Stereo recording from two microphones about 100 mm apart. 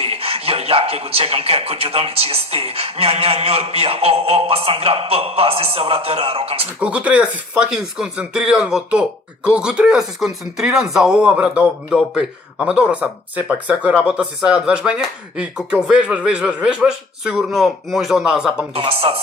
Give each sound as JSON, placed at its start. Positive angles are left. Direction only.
{"t": 0.0, "sound": "speech", "side_deg": -75}
{"t": 6.7, "sound": "a man's voice", "side_deg": -15}
{"t": 18.8, "sound": "speech", "side_deg": -70}